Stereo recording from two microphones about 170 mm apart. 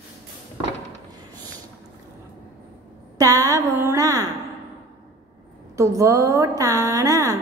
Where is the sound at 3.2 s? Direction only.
20° right (ahead or behind).